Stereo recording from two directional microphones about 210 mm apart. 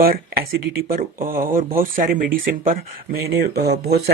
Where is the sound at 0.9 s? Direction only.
45° right (ahead or behind).